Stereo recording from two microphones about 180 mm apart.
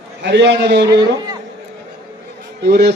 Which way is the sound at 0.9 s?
20° right (ahead or behind).